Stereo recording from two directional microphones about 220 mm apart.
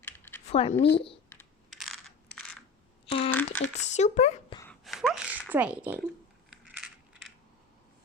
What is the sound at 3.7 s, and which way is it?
Speech, 30° left (ahead or behind).